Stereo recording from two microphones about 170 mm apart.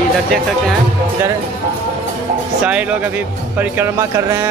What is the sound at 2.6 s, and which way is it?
Speech, 10° right (ahead or behind).